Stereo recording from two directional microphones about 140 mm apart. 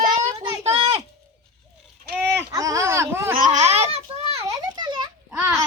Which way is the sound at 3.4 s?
60° right (ahead or behind).